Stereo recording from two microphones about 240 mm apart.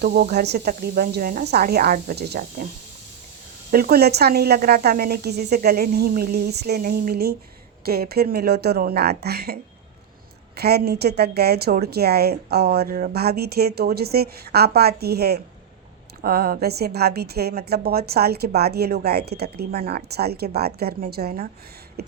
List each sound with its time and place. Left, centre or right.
0.0 s a woman's voice: right
3.7 s a woman's voice: right
22.0 s a sound: right